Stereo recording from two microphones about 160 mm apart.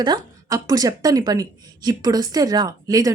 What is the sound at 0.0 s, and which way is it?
A woman's voice, 25° right (ahead or behind).